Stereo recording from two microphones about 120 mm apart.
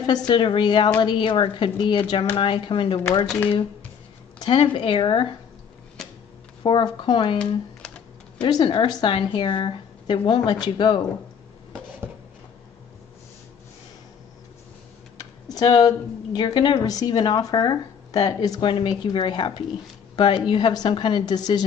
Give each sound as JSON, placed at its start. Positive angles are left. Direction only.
{"t": 0.3, "sound": "speech", "side_deg": 45}
{"t": 4.4, "sound": "speech", "side_deg": 50}
{"t": 6.0, "sound": "tick-tock", "side_deg": 0}
{"t": 6.6, "sound": "a woman's voice", "side_deg": 45}
{"t": 7.3, "sound": "computer keyboard", "side_deg": 5}
{"t": 8.4, "sound": "a woman's voice", "side_deg": 35}
{"t": 15.1, "sound": "computer keyboard", "side_deg": 30}
{"t": 16.3, "sound": "a woman's voice", "side_deg": 40}